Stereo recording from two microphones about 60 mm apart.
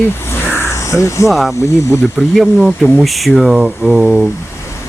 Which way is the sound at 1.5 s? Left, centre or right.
Left.